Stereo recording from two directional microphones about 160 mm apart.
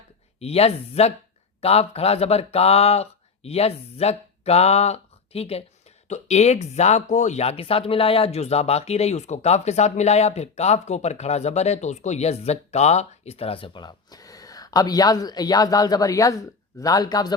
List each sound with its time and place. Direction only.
0.3 s speech: 40° left (ahead or behind); by 17.3 s 25° left (ahead or behind)